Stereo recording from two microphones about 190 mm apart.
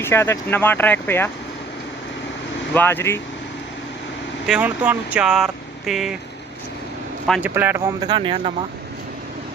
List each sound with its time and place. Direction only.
0.0 s speech: 10° left (ahead or behind)
2.7 s speech: 10° left (ahead or behind)
4.4 s speech: 5° right (ahead or behind)
7.4 s a man's voice: 10° right (ahead or behind)
8.1 s speech: 25° right (ahead or behind)